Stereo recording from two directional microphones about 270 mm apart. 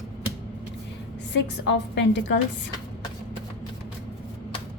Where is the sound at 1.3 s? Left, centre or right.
Left.